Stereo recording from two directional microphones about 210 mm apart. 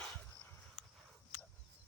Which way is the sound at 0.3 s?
10° left (ahead or behind).